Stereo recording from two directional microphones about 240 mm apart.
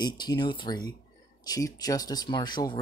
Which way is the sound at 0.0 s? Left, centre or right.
Centre.